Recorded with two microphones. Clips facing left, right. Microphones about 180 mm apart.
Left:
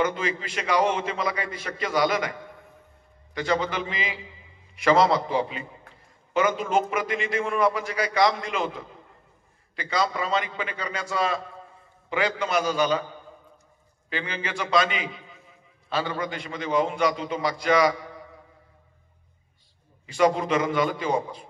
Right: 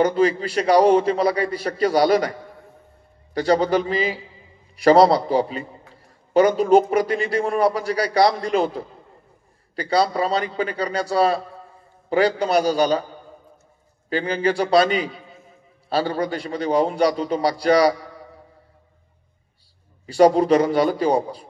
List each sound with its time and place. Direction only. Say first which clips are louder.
0.0 s a man's voice: right 8 dB; 35° right (ahead or behind)
3.3 s a man's voice: right 8 dB; 35° right (ahead or behind)
14.0 s a man's voice: right 11 dB; 35° right (ahead or behind)
20.1 s a man's voice: right 7 dB; 35° right (ahead or behind)